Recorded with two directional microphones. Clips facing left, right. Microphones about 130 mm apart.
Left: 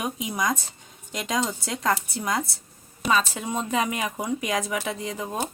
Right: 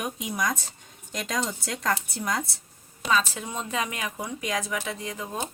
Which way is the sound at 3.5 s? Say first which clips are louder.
Left 5 dB; 10° left (ahead or behind).